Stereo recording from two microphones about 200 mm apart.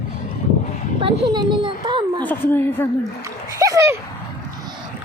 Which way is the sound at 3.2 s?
15° right (ahead or behind).